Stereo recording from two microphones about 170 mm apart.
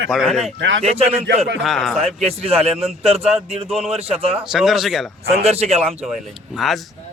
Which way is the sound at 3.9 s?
35° right (ahead or behind).